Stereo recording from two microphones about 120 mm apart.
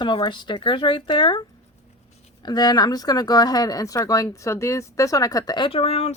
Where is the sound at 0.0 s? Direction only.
40° left (ahead or behind).